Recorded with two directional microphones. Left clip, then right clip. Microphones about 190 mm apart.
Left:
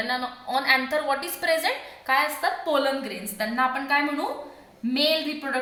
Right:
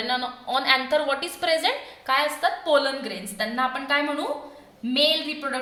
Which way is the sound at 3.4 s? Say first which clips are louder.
Left 1 dB; 50° right (ahead or behind).